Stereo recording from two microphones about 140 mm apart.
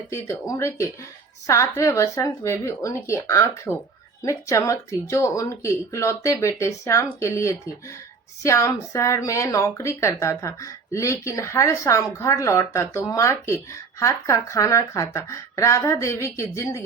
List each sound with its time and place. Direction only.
0.1 s speech: 20° left (ahead or behind)